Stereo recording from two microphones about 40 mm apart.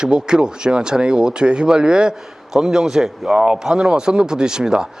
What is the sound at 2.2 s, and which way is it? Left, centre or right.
A man's voice, centre.